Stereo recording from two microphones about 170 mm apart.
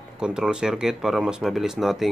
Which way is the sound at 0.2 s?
5° right (ahead or behind).